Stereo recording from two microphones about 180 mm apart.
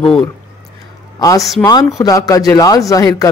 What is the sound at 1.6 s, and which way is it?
Speech, 20° left (ahead or behind).